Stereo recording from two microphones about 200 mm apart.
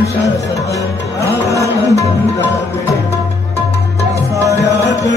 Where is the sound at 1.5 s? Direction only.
15° left (ahead or behind).